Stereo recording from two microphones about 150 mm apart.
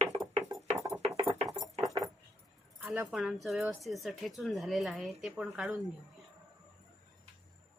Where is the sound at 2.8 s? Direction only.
5° right (ahead or behind).